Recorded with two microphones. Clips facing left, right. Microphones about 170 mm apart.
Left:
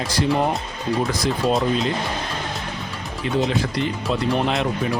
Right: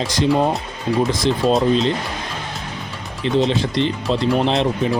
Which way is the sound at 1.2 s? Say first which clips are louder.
Right 4 dB; 20° right (ahead or behind).